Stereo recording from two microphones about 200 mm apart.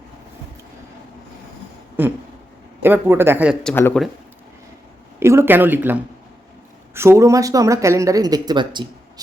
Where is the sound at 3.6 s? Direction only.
5° left (ahead or behind).